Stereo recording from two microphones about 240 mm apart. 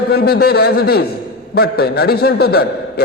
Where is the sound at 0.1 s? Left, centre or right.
Left.